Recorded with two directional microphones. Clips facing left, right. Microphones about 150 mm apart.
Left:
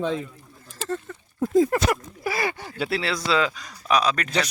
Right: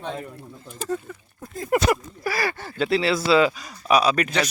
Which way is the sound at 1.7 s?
15° right (ahead or behind).